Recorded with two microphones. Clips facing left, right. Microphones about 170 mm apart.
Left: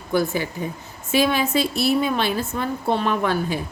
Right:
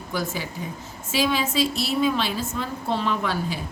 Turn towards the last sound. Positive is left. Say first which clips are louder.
# left 4 dB
turn(degrees=55)  # may be behind; listen again after turning